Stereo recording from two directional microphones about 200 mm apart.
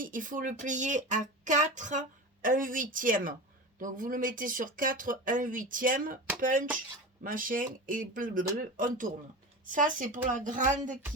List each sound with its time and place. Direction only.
0.0 s speech: 40° right (ahead or behind)